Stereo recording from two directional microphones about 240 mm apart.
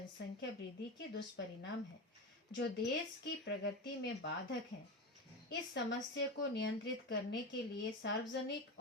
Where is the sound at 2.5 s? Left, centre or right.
Left.